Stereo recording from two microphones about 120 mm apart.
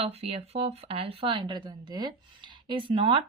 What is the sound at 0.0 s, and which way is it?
Speech, 60° right (ahead or behind).